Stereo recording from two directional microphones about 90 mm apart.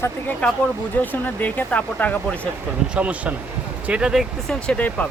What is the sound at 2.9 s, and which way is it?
Speech, 15° right (ahead or behind).